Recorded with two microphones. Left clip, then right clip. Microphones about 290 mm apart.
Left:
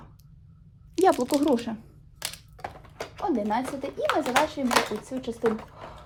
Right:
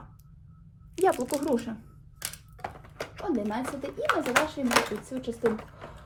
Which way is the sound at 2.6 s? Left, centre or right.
Centre.